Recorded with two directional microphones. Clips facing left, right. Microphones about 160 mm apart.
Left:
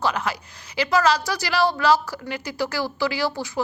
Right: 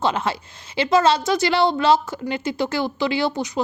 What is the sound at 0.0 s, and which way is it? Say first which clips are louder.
Speech: right 3 dB; 25° right (ahead or behind).